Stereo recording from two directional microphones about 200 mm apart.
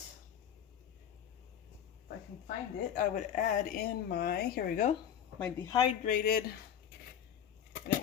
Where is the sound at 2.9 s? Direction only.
40° left (ahead or behind).